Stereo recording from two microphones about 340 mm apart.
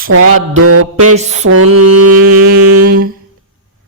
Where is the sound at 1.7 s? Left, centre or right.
Right.